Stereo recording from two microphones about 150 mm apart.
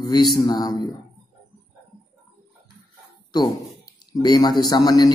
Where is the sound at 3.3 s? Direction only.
25° left (ahead or behind).